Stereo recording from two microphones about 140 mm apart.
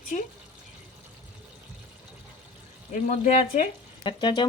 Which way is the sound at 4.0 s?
35° left (ahead or behind).